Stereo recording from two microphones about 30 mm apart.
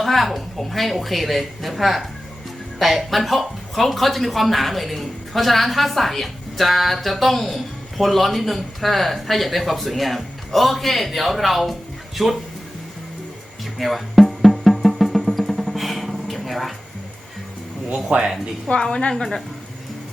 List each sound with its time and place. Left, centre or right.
0.0 s speech: centre
13.7 s music: centre
17.9 s speech: right
18.7 s a woman's voice: left
19.1 s speech: centre